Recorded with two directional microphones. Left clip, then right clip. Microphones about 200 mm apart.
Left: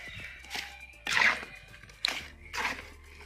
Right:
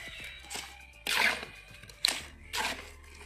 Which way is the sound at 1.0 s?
45° right (ahead or behind).